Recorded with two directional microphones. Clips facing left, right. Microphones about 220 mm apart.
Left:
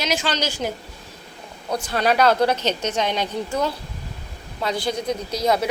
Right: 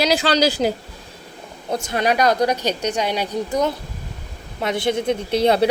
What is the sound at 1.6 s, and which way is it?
A woman's voice, 20° right (ahead or behind).